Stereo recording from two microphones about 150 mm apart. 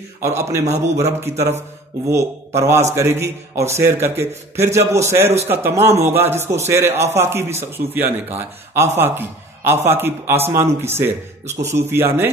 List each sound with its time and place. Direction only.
0.8 s a man's voice: 20° right (ahead or behind)